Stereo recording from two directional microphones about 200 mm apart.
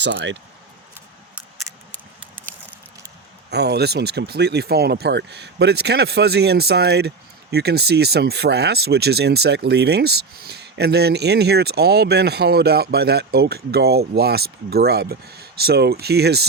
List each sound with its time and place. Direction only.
0.0 s speech: 60° right (ahead or behind)
3.5 s speech: 55° right (ahead or behind)